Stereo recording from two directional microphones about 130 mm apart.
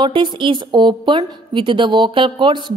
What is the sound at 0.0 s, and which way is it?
A woman's voice, 40° right (ahead or behind).